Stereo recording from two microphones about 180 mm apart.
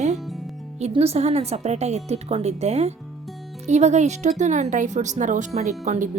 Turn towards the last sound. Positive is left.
turn(degrees=-40)  # may be behind; listen again after turning